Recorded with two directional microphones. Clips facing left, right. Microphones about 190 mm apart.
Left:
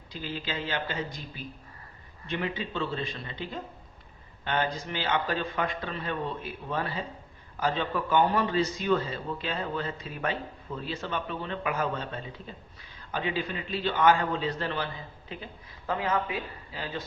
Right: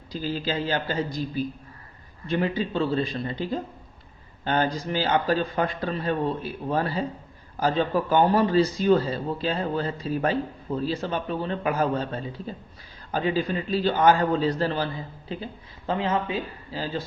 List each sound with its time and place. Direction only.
0.1 s a man's voice: 35° right (ahead or behind)